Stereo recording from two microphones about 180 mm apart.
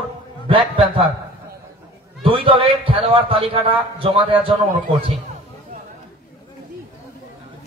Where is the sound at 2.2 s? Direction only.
30° right (ahead or behind).